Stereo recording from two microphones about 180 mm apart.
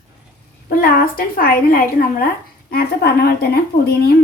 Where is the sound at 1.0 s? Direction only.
55° left (ahead or behind).